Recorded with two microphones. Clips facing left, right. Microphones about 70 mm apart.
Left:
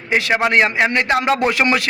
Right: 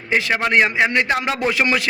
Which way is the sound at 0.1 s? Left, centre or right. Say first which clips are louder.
Left 2 dB; centre.